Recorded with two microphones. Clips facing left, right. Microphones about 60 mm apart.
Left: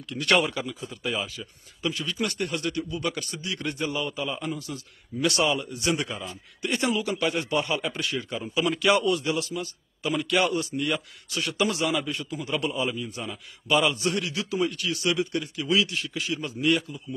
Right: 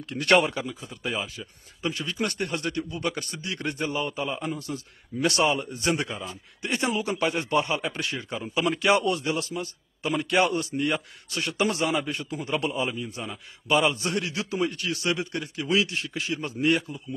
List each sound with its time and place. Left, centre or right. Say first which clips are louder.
0.0 s speech: right 2 dB; right
6.6 s a man's voice: left 1 dB; right
8.5 s speech: even; right
8.8 s a man's voice: left 1 dB; right